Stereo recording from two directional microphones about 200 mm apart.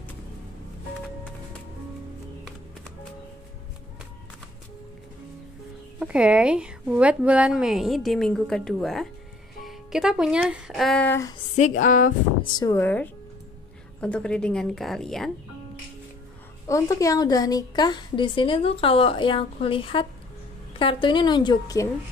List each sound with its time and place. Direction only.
5.9 s speech: 5° right (ahead or behind); by 11.3 s 10° left (ahead or behind)
11.5 s speech: 40° left (ahead or behind)
12.5 s speech: 15° left (ahead or behind)
16.6 s a woman's voice: 15° left (ahead or behind)